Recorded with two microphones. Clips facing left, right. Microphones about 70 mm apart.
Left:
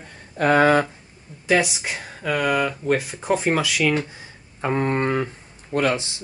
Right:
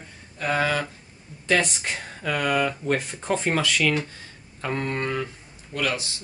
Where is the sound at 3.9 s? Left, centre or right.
Centre.